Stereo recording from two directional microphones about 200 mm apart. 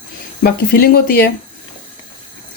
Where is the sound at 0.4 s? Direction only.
50° left (ahead or behind).